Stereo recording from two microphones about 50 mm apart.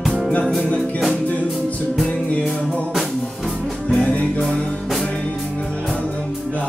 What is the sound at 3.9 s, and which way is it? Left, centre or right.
Music, left.